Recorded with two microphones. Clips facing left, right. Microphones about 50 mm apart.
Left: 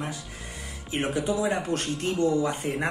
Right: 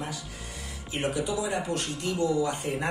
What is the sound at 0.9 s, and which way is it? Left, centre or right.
A man's voice, left.